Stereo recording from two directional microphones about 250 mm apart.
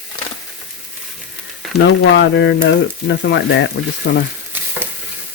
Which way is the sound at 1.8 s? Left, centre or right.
Left.